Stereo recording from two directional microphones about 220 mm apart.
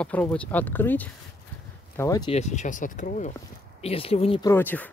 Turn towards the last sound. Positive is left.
turn(degrees=10)  # may be behind; listen again after turning